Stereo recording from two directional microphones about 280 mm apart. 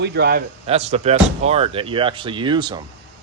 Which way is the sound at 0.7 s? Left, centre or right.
Right.